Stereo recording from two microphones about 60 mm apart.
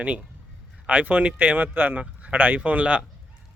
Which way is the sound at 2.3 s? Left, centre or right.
Right.